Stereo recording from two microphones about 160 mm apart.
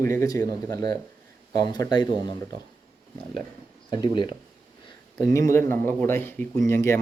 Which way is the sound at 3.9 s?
25° left (ahead or behind).